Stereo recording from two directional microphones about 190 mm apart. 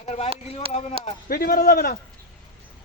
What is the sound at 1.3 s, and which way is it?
Speech, 50° left (ahead or behind).